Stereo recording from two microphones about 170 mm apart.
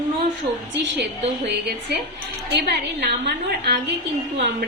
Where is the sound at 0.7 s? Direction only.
85° right.